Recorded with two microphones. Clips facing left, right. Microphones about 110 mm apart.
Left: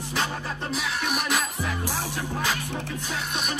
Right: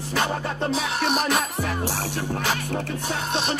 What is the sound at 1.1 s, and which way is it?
Music, 25° right (ahead or behind).